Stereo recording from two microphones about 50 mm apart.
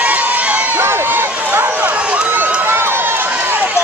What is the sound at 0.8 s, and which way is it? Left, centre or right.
Run, right.